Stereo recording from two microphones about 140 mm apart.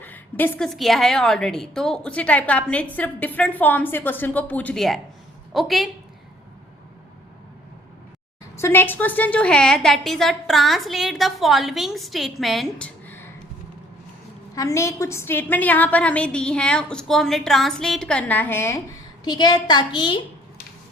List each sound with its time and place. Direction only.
0.0 s a sound: 15° left (ahead or behind)
0.7 s a woman's voice: centre (ahead or behind)
8.5 s a woman's voice: 15° left (ahead or behind); by 12.9 s centre (ahead or behind)
13.1 s a sound: 15° left (ahead or behind)
14.5 s a woman's voice: 25° left (ahead or behind)
19.2 s a woman's voice: 30° left (ahead or behind)